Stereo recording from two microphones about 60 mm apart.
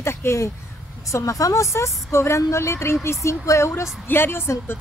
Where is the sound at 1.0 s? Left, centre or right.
Left.